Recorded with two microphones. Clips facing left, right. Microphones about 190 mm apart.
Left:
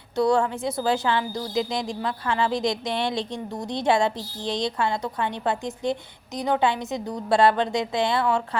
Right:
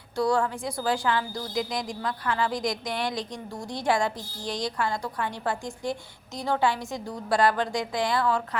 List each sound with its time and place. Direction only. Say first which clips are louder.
0.2 s a woman's voice: left 4 dB; 20° left (ahead or behind)